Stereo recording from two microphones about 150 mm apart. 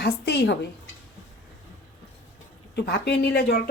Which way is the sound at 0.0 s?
90° left.